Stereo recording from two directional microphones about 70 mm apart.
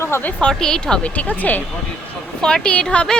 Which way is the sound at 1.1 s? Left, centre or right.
Left.